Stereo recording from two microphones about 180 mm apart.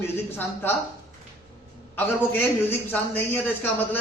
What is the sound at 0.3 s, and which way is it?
Speech, 10° left (ahead or behind).